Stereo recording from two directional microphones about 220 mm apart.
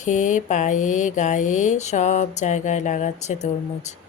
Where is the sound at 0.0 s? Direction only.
35° left (ahead or behind).